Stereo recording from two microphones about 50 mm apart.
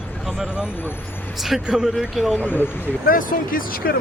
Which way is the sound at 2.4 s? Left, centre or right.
Left.